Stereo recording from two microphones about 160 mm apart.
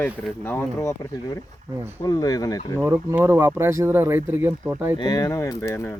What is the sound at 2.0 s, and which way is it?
Speech, 20° left (ahead or behind).